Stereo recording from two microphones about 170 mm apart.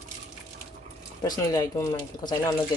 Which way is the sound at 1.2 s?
20° left (ahead or behind).